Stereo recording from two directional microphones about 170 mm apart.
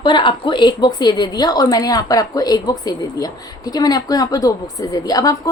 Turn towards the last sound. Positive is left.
turn(degrees=20)  # may be behind; listen again after turning